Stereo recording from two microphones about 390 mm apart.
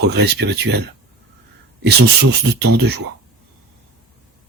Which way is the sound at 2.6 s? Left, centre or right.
Right.